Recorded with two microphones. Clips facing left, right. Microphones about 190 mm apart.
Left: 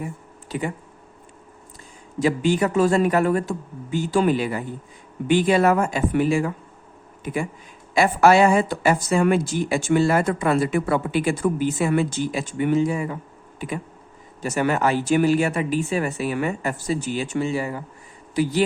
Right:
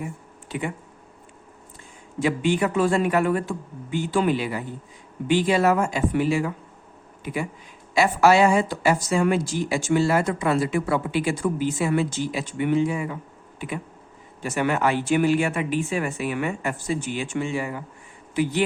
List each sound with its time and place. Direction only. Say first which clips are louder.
0.4 s speech: left 2 dB; 40° left (ahead or behind)
2.1 s speech: left 2 dB; 40° left (ahead or behind)
7.9 s speech: left 2 dB; 50° left (ahead or behind); by 17.8 s 35° left (ahead or behind)